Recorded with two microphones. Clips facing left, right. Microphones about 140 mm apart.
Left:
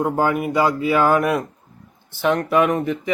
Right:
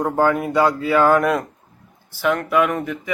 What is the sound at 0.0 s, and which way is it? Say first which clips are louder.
A man's voice: right 1 dB; 15° left (ahead or behind).